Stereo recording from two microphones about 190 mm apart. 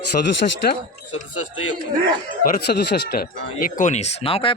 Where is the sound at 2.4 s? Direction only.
55° left (ahead or behind).